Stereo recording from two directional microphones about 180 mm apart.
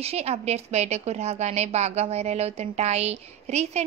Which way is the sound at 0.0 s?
35° right (ahead or behind).